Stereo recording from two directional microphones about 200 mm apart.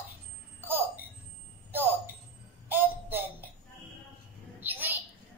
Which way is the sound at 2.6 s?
10° right (ahead or behind).